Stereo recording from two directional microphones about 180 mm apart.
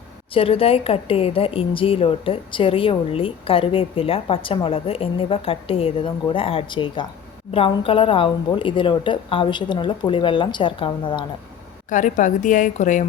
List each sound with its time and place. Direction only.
0.3 s a woman's voice: 30° left (ahead or behind)
11.9 s a woman's voice: 45° left (ahead or behind)